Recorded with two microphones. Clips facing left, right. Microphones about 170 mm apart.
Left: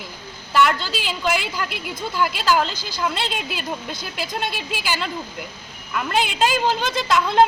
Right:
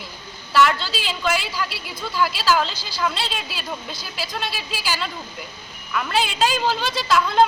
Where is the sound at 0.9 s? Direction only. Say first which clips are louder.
Left 1 dB; 50° left (ahead or behind).